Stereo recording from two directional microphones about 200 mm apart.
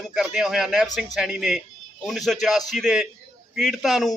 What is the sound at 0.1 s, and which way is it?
Speech, centre (ahead or behind).